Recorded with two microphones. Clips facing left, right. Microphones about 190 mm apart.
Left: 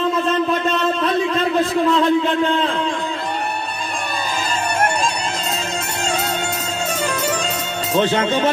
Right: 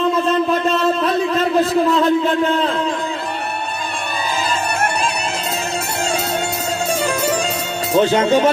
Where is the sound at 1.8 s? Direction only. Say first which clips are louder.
Right 1 dB; 40° right (ahead or behind).